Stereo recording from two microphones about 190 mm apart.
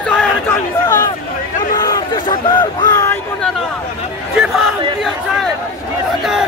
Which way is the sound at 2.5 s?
20° left (ahead or behind).